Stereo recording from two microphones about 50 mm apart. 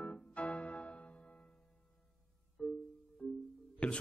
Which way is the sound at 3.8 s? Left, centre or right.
Centre.